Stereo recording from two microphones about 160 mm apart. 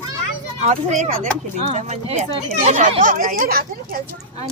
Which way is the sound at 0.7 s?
50° right (ahead or behind).